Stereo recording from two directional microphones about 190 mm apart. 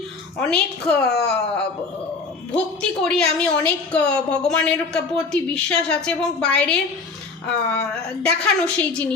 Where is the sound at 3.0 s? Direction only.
5° left (ahead or behind).